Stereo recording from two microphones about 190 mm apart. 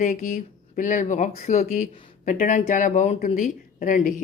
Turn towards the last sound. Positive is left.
turn(degrees=45)  # may be behind; listen again after turning